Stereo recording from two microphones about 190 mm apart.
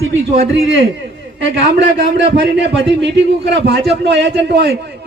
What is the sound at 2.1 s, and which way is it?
A man's voice, 65° right (ahead or behind).